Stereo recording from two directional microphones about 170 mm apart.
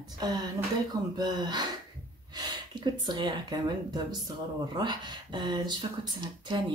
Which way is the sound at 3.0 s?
25° right (ahead or behind).